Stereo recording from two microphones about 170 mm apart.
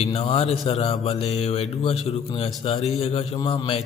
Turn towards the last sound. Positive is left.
turn(degrees=30)  # may be behind; listen again after turning